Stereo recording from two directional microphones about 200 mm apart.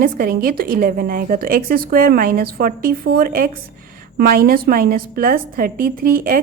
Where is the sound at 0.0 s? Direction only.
45° right (ahead or behind).